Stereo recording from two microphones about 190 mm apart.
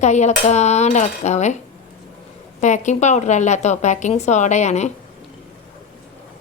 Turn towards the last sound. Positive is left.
turn(degrees=35)  # may be behind; listen again after turning